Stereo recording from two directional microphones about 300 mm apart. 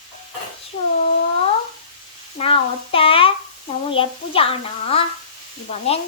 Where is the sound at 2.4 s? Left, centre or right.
Centre.